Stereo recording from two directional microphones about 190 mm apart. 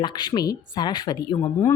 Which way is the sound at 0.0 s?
25° left (ahead or behind).